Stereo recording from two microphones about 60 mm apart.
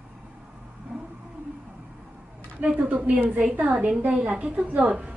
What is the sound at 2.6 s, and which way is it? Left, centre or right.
A woman's voice, centre.